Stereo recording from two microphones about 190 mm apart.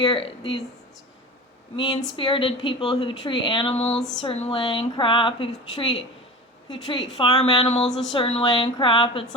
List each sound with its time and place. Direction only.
0.0 s speech: 30° left (ahead or behind)
1.7 s speech: 25° left (ahead or behind)